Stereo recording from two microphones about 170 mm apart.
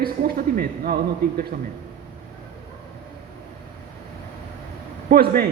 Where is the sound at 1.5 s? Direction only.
50° right (ahead or behind).